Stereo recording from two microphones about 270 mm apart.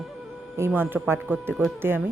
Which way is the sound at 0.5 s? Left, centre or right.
Centre.